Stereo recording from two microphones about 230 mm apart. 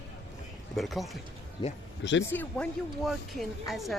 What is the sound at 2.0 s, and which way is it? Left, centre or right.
Speech, left.